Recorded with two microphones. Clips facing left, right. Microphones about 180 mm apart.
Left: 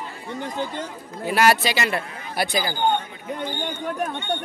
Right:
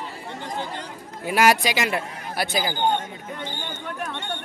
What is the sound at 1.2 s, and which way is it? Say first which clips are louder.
Speech: even; 10° right (ahead or behind).